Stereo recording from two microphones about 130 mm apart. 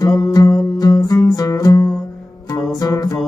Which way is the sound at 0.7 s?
30° left (ahead or behind).